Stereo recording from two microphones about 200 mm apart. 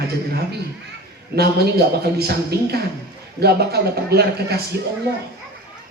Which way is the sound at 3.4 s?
55° right (ahead or behind).